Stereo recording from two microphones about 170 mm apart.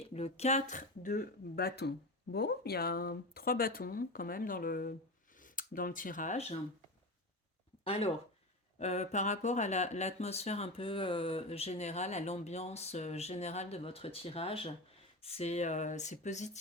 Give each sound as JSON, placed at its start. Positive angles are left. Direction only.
{"t": 0.0, "sound": "speech", "side_deg": 35}
{"t": 7.9, "sound": "speech", "side_deg": 35}